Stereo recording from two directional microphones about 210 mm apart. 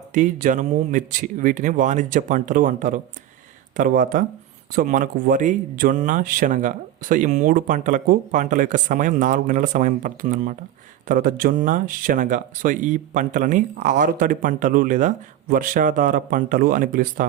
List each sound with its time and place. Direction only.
0.1 s speech: 40° right (ahead or behind)